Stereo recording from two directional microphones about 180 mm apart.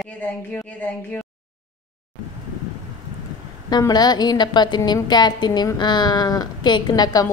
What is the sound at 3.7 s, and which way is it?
A woman's voice, 20° left (ahead or behind).